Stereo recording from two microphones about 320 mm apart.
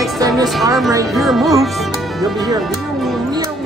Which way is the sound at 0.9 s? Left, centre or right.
Centre.